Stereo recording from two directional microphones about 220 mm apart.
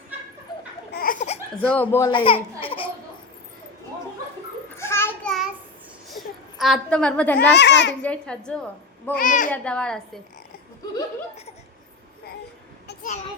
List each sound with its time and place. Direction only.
0.9 s laughter: 40° left (ahead or behind)
1.6 s speech: 10° left (ahead or behind); by 2.9 s 25° left (ahead or behind)
4.8 s a sound: 10° left (ahead or behind)
7.3 s a child's voice: 50° left (ahead or behind)
8.0 s a woman's voice: 5° left (ahead or behind)
9.1 s a child's voice: 35° left (ahead or behind)
9.5 s a woman's voice: 5° left (ahead or behind)
12.9 s a sound: 40° left (ahead or behind)